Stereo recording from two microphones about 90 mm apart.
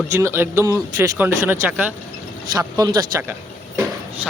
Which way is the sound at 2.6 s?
45° right (ahead or behind).